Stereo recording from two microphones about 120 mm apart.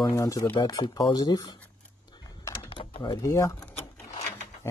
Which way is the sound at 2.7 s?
45° left (ahead or behind).